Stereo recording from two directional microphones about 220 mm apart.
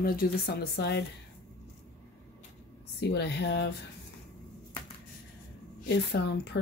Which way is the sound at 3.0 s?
50° left (ahead or behind).